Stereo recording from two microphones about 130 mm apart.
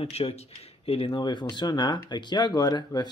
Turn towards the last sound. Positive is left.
turn(degrees=30)  # may be behind; listen again after turning